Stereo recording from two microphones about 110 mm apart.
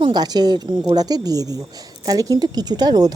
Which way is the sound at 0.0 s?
40° right (ahead or behind).